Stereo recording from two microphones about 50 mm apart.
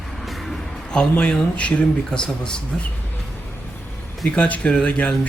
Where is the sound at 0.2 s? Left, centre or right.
Centre.